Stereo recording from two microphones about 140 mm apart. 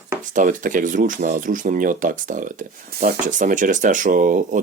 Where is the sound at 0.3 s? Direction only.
70° right (ahead or behind).